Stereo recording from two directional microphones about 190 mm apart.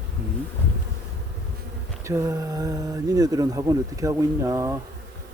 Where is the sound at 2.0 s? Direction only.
15° right (ahead or behind).